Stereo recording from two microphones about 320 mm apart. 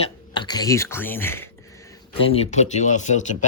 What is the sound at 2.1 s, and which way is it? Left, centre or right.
Speech, centre.